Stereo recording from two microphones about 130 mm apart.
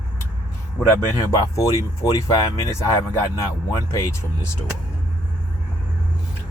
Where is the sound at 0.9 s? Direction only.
25° left (ahead or behind).